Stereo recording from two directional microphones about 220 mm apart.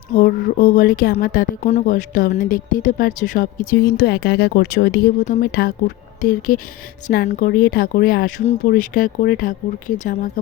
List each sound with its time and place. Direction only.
0.1 s speech: 40° left (ahead or behind)